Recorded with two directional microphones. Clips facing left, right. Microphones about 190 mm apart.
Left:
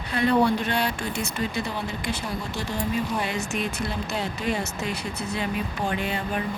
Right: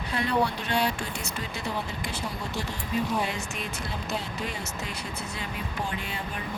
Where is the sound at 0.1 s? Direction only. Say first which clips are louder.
Left 6 dB; 60° left (ahead or behind).